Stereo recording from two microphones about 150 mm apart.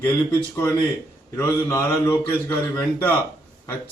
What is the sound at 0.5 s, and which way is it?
A man's voice, 15° left (ahead or behind).